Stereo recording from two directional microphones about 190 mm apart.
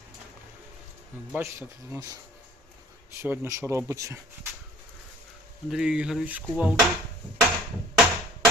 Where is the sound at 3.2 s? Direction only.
15° right (ahead or behind).